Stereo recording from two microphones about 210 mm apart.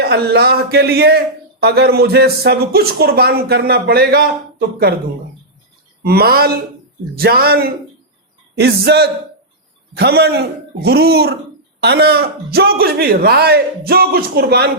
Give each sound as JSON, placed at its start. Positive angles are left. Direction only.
{"t": 0.0, "sound": "speech", "side_deg": -50}
{"t": 6.0, "sound": "speech", "side_deg": -50}